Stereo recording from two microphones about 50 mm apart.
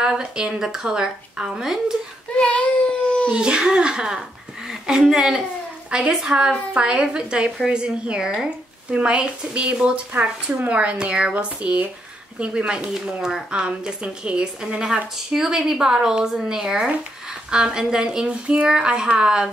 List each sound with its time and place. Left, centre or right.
0.0 s speech: centre
2.3 s baby cry: left
3.3 s a woman's voice: centre